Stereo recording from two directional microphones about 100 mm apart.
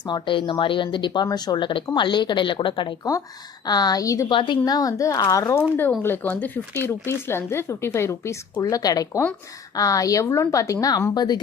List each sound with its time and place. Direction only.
0.0 s speech: 50° left (ahead or behind)
3.0 s a woman's voice: 35° left (ahead or behind)
4.3 s a woman's voice: 50° left (ahead or behind); by 5.5 s 35° left (ahead or behind)
5.5 s a woman's voice: 20° left (ahead or behind); by 11.3 s 45° left (ahead or behind)